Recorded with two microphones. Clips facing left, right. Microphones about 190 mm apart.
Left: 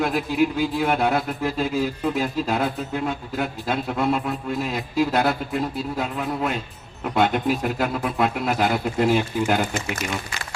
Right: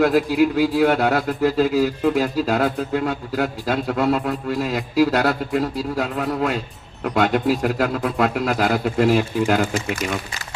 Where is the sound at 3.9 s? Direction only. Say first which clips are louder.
Right 3 dB; 75° right (ahead or behind).